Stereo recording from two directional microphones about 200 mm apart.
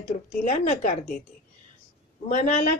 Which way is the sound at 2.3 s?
35° left (ahead or behind).